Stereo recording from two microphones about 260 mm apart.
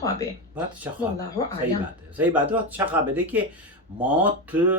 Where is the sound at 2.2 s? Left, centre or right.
Centre.